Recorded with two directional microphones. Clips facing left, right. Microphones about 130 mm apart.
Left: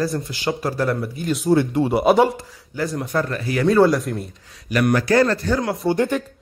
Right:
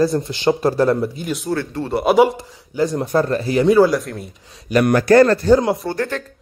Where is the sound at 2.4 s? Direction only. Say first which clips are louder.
Right 6 dB; 20° right (ahead or behind).